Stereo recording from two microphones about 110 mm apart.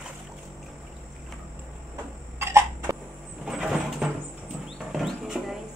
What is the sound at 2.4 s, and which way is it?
Cough, 25° right (ahead or behind).